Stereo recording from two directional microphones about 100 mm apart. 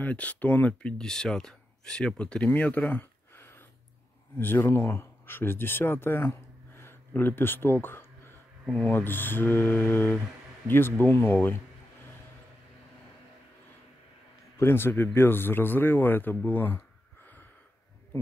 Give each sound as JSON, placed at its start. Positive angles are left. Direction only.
{"t": 0.0, "sound": "speech", "side_deg": 15}
{"t": 14.6, "sound": "speech", "side_deg": 25}